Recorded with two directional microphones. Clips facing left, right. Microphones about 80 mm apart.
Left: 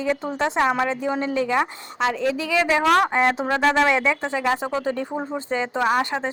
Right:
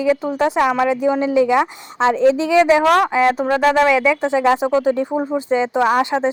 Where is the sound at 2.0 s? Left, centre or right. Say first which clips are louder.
Right 8 dB; right.